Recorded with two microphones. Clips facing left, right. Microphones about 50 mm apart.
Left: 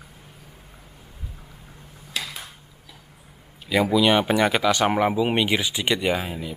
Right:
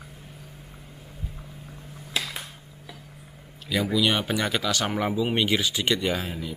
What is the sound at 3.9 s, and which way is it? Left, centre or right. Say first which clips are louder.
Speech: left 6 dB; centre.